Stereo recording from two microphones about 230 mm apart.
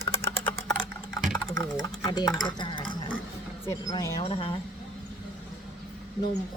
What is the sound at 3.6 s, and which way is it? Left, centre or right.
Speech, centre.